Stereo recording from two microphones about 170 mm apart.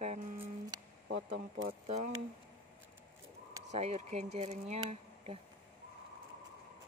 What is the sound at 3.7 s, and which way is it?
Speech, 40° right (ahead or behind).